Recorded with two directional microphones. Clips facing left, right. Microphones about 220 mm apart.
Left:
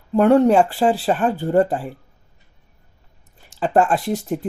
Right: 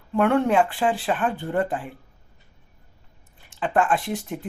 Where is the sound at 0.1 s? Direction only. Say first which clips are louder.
Left 6 dB; 35° left (ahead or behind).